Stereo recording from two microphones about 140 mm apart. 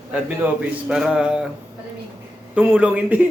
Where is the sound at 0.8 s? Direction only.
5° right (ahead or behind).